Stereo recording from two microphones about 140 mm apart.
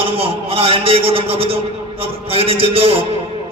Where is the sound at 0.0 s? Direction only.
40° right (ahead or behind).